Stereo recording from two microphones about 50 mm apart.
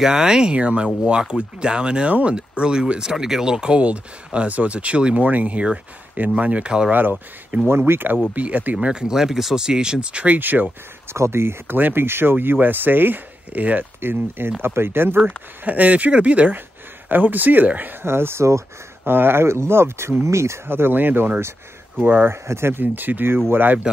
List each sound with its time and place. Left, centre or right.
0.0 s speech: centre
6.9 s speech: right
7.7 s speech: right
8.4 s speech: right
8.7 s speech: centre; by 10.7 s right
11.1 s speech: right
14.6 s speech: right
15.6 s speech: right
18.0 s speech: right
20.6 s speech: right
22.3 s speech: right
22.9 s speech: right